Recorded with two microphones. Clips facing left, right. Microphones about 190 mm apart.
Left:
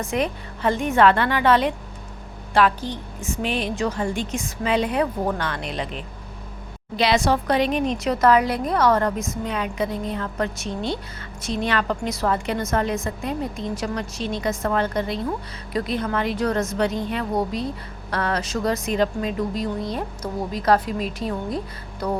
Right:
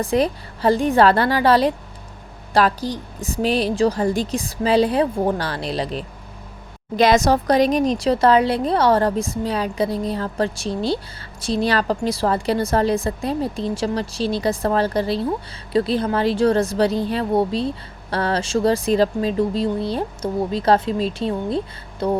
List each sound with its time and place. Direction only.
0.0 s a woman's voice: 35° right (ahead or behind)
6.9 s a woman's voice: 45° right (ahead or behind); by 22.2 s 25° right (ahead or behind)